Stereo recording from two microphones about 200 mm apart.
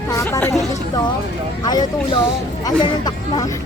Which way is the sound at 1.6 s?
20° left (ahead or behind).